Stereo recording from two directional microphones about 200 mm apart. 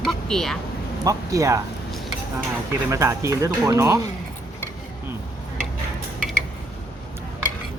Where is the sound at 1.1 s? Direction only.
15° right (ahead or behind).